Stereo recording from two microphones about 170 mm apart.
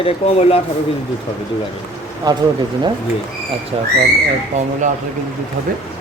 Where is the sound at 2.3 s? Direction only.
25° right (ahead or behind).